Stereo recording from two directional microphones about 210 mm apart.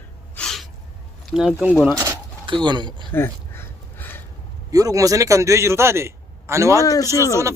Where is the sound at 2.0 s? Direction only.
15° right (ahead or behind).